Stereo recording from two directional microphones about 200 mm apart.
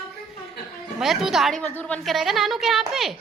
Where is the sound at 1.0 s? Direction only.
Centre (ahead or behind).